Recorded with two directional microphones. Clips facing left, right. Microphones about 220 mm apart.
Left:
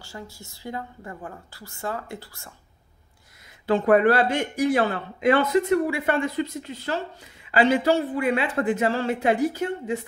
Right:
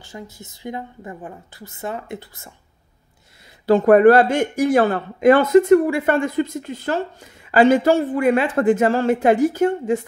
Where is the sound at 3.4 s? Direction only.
40° right (ahead or behind).